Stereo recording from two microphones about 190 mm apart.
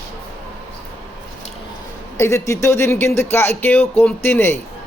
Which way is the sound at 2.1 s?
15° left (ahead or behind).